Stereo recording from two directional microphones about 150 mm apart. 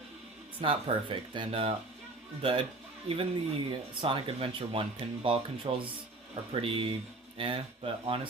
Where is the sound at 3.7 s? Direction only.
35° right (ahead or behind).